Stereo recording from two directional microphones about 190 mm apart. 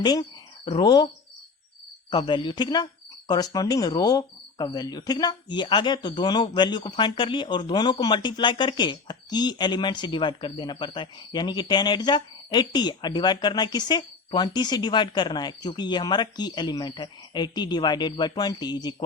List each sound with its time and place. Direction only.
0.0 s speech: 20° left (ahead or behind)